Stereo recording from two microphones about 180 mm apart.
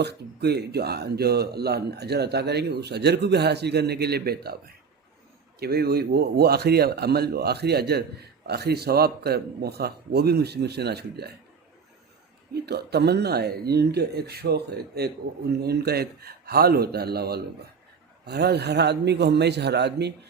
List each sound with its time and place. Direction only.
0.0 s speech: 65° right (ahead or behind)
12.5 s a man's voice: 65° right (ahead or behind)